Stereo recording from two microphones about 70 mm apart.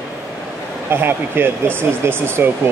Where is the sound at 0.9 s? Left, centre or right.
Right.